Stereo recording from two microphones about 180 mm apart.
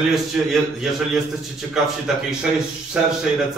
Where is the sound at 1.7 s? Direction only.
Centre (ahead or behind).